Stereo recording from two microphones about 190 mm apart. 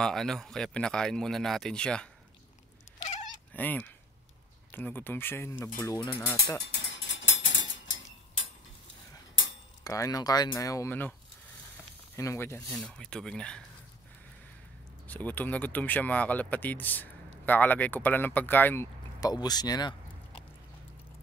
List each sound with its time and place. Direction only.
0.0 s speech: centre (ahead or behind)
3.5 s speech: 10° left (ahead or behind)
6.6 s cutlery: 70° left (ahead or behind)
9.8 s speech: 20° left (ahead or behind)
12.2 s speech: 15° left (ahead or behind)
15.0 s speech: 10° left (ahead or behind)